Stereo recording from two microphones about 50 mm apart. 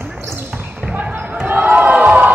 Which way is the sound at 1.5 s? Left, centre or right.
Right.